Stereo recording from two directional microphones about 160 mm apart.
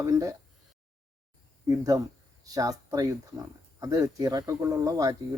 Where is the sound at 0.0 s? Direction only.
20° right (ahead or behind).